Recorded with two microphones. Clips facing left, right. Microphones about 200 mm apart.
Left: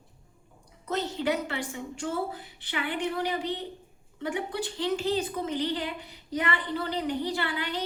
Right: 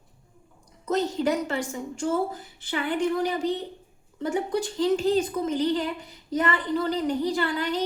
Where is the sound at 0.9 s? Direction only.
45° right (ahead or behind).